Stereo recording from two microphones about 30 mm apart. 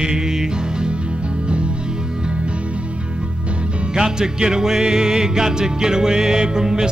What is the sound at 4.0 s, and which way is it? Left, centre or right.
Music, right.